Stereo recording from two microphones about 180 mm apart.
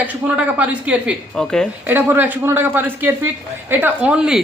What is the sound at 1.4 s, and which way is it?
Speech, 5° left (ahead or behind).